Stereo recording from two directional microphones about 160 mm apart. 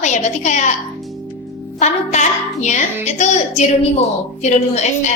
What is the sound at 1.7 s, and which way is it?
Child singing, 45° left (ahead or behind).